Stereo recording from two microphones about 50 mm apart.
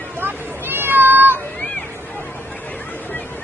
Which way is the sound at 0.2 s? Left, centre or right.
Right.